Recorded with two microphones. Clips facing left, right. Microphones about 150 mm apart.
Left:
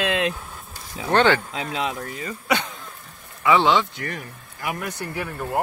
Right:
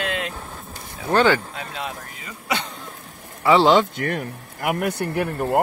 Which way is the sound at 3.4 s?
35° right (ahead or behind).